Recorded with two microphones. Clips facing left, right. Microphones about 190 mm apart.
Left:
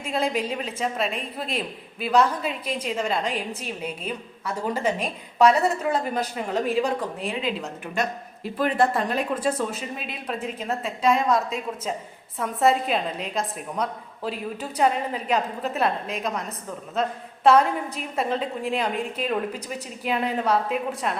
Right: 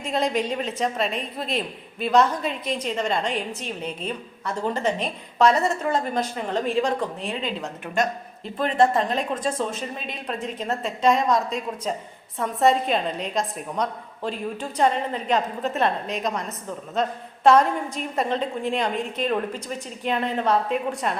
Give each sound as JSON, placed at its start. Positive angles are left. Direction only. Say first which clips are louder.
{"t": 0.1, "sound": "a woman's voice", "louder": "right 1 dB", "side_deg": 5}
{"t": 8.8, "sound": "a woman's voice", "louder": "right 4 dB", "side_deg": -20}
{"t": 9.0, "sound": "a woman's voice", "louder": "left 1 dB", "side_deg": 5}